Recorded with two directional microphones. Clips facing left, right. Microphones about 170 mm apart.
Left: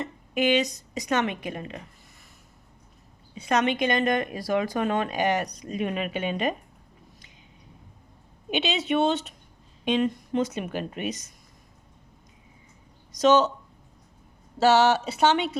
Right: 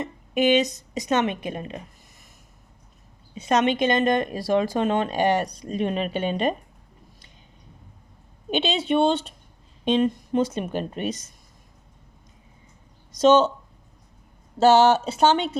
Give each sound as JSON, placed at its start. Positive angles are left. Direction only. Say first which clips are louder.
{"t": 0.0, "sound": "a woman's voice", "louder": "right 3 dB", "side_deg": -20}
{"t": 3.3, "sound": "speech", "louder": "right 3 dB", "side_deg": -20}
{"t": 8.4, "sound": "speech", "louder": "right 3 dB", "side_deg": -30}
{"t": 13.1, "sound": "speech", "louder": "right 3 dB", "side_deg": -30}
{"t": 14.6, "sound": "speech", "louder": "right 3 dB", "side_deg": -30}